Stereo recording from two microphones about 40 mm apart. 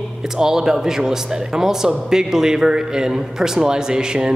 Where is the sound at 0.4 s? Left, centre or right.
Centre.